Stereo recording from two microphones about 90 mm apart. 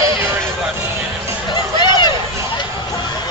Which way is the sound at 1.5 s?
55° left (ahead or behind).